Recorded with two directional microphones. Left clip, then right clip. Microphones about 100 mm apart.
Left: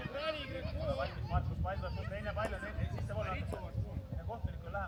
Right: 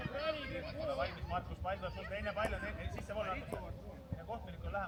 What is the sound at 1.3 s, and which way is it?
Speech, 25° right (ahead or behind).